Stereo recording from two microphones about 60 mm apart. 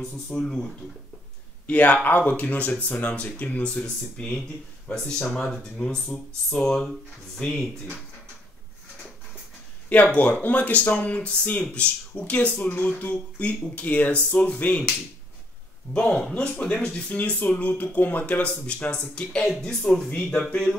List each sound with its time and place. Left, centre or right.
0.0 s speech: centre
1.7 s speech: left
10.1 s speech: left; by 16.4 s centre
16.4 s speech: centre